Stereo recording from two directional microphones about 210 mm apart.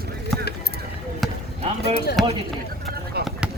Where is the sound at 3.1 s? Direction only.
50° right (ahead or behind).